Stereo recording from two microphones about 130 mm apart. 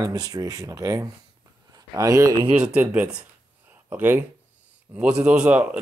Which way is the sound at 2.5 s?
10° right (ahead or behind).